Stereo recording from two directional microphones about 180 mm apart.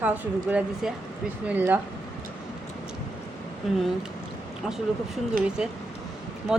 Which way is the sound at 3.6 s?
Centre (ahead or behind).